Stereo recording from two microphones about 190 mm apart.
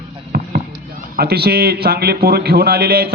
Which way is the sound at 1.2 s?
55° right (ahead or behind).